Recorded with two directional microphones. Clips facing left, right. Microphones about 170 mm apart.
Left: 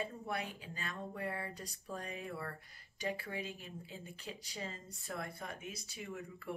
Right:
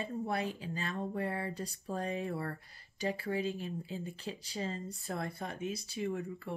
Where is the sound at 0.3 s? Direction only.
30° right (ahead or behind).